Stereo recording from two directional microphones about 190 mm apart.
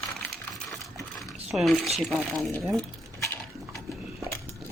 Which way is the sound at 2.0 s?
Centre (ahead or behind).